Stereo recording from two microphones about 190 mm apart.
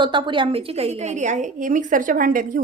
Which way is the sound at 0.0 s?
25° right (ahead or behind).